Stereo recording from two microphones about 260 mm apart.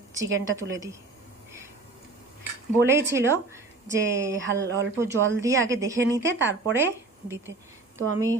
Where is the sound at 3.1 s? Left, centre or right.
Centre.